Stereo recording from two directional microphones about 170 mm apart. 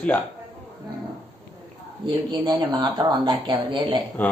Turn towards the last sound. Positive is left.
turn(degrees=10)  # may be behind; listen again after turning